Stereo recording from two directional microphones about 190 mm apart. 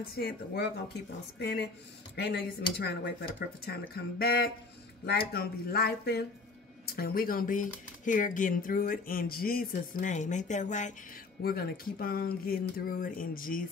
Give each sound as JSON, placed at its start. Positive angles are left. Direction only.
{"t": 0.0, "sound": "speech", "side_deg": 55}
{"t": 11.4, "sound": "speech", "side_deg": 50}